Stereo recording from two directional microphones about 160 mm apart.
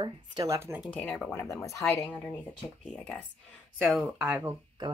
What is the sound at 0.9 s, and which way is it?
Speech, 5° left (ahead or behind).